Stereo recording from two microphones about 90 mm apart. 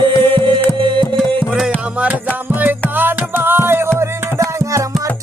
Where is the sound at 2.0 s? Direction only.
20° right (ahead or behind).